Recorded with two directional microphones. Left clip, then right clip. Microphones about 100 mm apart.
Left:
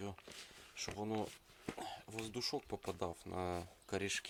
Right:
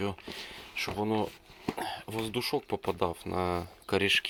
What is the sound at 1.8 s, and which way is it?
Speech, 5° left (ahead or behind).